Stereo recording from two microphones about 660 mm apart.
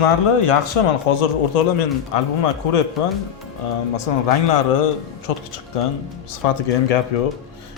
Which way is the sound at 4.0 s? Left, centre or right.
Left.